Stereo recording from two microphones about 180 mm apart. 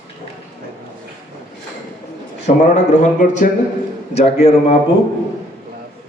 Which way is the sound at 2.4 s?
40° left (ahead or behind).